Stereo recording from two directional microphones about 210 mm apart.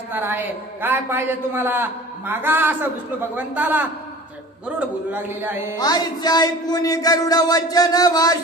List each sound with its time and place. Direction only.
0.1 s a man's voice: 10° right (ahead or behind)
5.8 s speech: 20° left (ahead or behind)